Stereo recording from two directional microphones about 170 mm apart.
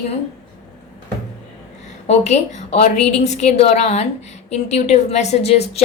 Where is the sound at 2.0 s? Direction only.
40° left (ahead or behind).